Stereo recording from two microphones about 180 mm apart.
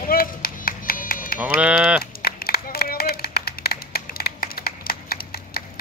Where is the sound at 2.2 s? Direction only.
60° left (ahead or behind).